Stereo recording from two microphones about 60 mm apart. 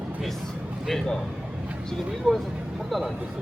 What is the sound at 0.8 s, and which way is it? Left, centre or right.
Speech, centre.